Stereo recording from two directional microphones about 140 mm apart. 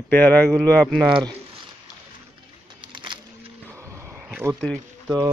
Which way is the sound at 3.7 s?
20° right (ahead or behind).